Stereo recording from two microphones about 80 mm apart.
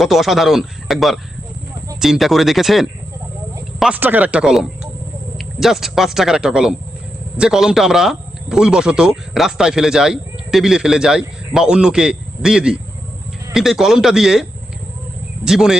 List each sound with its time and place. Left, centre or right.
0.0 s speech: centre
3.9 s speech: right; by 14.4 s centre
15.4 s speech: centre